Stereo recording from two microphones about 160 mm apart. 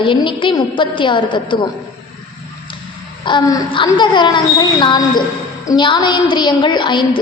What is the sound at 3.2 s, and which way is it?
A woman's voice, 25° left (ahead or behind).